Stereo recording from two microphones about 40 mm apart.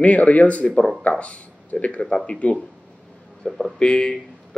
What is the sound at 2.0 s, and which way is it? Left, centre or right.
A man's voice, left.